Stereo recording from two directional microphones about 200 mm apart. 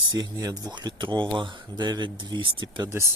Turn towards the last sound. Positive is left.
turn(degrees=-15)  # may be behind; listen again after turning